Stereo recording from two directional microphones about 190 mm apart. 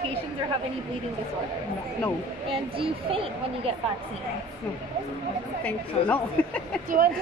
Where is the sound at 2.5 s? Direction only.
30° right (ahead or behind).